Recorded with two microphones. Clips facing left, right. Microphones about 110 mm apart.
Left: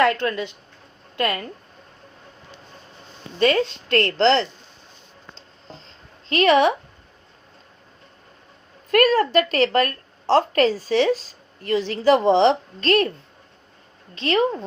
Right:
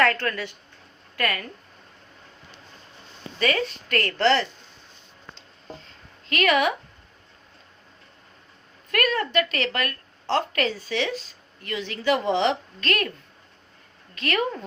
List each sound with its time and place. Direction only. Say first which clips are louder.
0.0 s a woman's voice: left 3 dB; 20° left (ahead or behind)
3.3 s a woman's voice: left 6 dB; 25° left (ahead or behind)
5.8 s a sound: left 2 dB; 30° left (ahead or behind)
8.9 s a woman's voice: left 8 dB; 40° left (ahead or behind)
14.2 s a woman's voice: left 5 dB; 25° left (ahead or behind)